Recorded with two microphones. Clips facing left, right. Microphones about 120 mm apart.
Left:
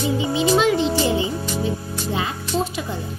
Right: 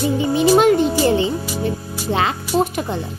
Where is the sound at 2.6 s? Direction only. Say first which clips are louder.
Right 6 dB; 60° right (ahead or behind).